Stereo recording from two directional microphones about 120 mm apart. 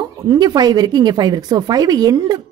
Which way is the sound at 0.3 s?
35° right (ahead or behind).